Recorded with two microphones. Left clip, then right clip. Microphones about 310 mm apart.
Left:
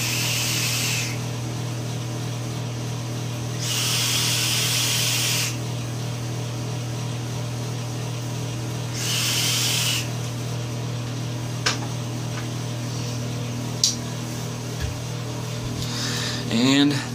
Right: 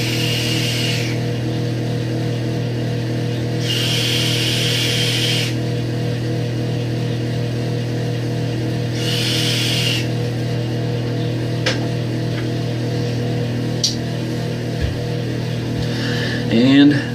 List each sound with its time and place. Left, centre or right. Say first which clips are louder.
16.5 s music: right 6 dB; left